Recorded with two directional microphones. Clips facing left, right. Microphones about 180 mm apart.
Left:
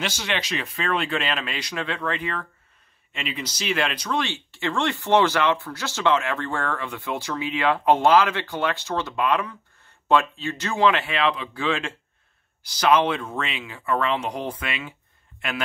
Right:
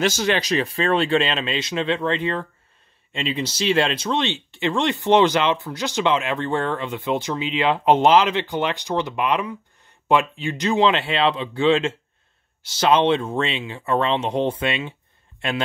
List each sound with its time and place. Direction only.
0.0 s speech: 40° right (ahead or behind); by 15.0 s 25° right (ahead or behind)